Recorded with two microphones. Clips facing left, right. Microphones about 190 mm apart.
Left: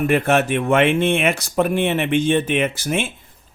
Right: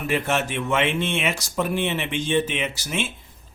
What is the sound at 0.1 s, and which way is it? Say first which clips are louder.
A man's voice: left 3 dB; 55° left (ahead or behind).